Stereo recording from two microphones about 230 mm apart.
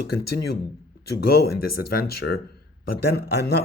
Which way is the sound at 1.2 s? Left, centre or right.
Left.